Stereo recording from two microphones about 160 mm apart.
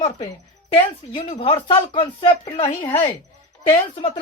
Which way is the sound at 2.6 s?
10° left (ahead or behind).